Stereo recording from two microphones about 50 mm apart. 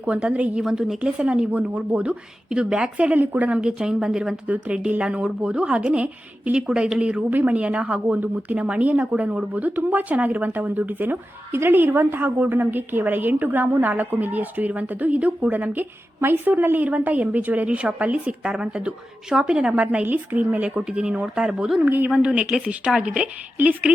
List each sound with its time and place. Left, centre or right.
0.0 s speech: right
0.6 s a woman's voice: centre
1.2 s speech: right
3.6 s a woman's voice: centre
4.4 s a woman's voice: right; by 21.8 s centre
21.8 s a woman's voice: right
22.2 s speech: right